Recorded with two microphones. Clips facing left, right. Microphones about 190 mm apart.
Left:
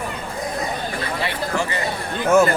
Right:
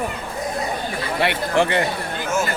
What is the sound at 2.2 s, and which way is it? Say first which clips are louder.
Speech: left 9 dB; 60° left (ahead or behind).